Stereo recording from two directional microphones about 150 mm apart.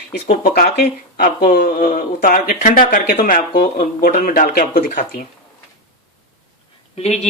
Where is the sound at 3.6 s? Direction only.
80° left; by 5.0 s 60° left (ahead or behind).